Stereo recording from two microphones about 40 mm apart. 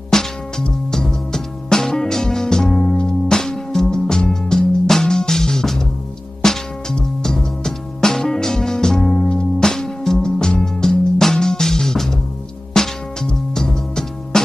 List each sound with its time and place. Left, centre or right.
0.1 s music: centre